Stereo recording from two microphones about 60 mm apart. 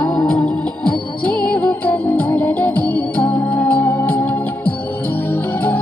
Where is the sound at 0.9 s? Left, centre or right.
Centre.